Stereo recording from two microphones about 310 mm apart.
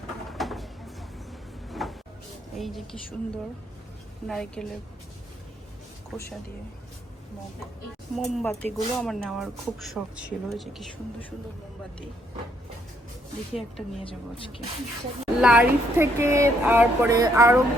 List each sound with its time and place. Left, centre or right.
0.3 s a sound: centre
1.7 s cupboard open or close: centre
2.6 s speech: centre
4.3 s speech: centre
6.1 s speech: centre
8.1 s speech: centre
13.5 s speech: centre
14.0 s speech: centre
15.4 s speech: centre